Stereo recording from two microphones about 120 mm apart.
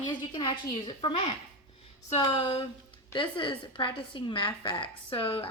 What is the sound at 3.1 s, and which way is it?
A woman's voice, 45° left (ahead or behind).